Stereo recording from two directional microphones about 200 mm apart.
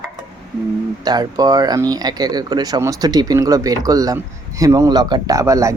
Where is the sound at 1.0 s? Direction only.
20° right (ahead or behind).